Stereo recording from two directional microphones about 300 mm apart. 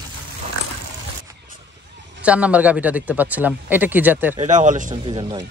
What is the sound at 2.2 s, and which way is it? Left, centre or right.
Speech, centre.